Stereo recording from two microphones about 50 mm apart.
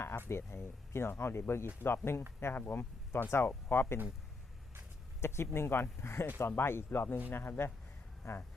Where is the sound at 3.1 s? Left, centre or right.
Left.